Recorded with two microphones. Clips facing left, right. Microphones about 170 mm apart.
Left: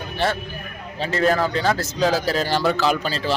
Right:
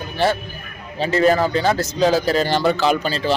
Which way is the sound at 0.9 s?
Centre (ahead or behind).